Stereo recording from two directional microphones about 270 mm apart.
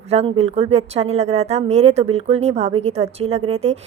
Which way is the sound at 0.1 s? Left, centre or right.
Right.